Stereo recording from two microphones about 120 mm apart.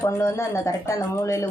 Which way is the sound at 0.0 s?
25° left (ahead or behind).